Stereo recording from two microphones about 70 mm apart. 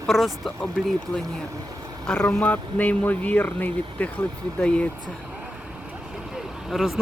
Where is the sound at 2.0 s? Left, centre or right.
Centre.